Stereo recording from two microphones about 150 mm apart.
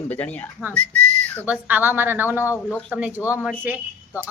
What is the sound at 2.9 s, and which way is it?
Speech, 10° right (ahead or behind).